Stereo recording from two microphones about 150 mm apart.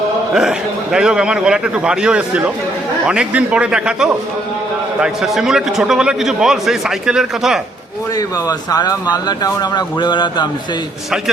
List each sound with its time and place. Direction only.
0.3 s a man's voice: 5° right (ahead or behind)
8.1 s speech: 25° left (ahead or behind)